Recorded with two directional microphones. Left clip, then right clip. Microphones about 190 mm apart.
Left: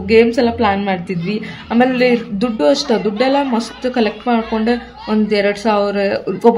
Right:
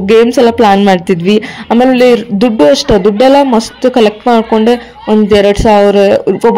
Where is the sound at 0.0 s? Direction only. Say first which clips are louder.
Right 6 dB; 50° right (ahead or behind).